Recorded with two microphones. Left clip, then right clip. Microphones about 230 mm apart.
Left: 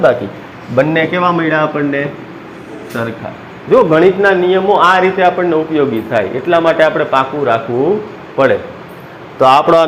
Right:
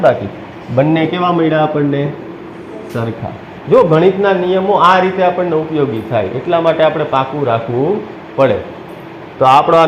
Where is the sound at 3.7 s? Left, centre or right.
Left.